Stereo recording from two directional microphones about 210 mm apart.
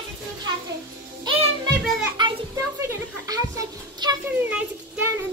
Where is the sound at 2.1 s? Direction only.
20° right (ahead or behind).